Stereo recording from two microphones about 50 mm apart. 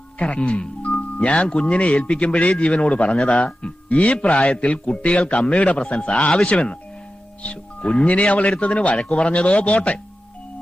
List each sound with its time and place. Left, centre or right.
0.2 s speech: left